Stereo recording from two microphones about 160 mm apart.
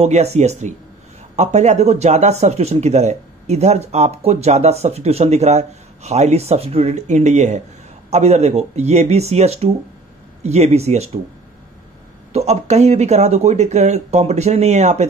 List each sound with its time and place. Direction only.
0.0 s speech: 40° right (ahead or behind)
12.3 s speech: 40° right (ahead or behind)